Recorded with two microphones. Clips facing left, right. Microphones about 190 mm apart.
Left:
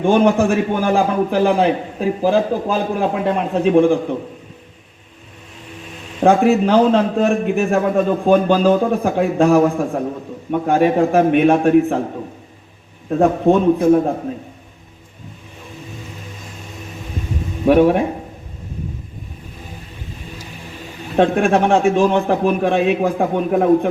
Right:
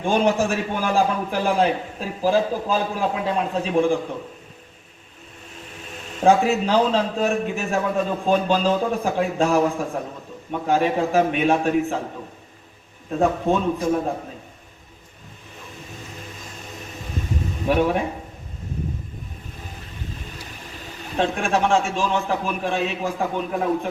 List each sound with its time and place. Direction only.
0.0 s a man's voice: 55° left (ahead or behind)
6.2 s a man's voice: 55° left (ahead or behind)
13.1 s a man's voice: 55° left (ahead or behind)
17.7 s a man's voice: 55° left (ahead or behind)
21.2 s a man's voice: 55° left (ahead or behind)